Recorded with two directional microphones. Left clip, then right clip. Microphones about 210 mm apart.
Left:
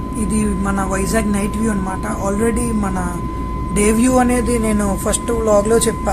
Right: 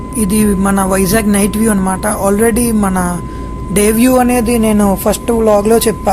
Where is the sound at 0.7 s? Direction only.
45° right (ahead or behind).